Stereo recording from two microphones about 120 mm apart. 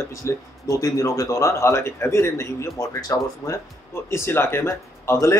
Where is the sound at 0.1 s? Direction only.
25° left (ahead or behind).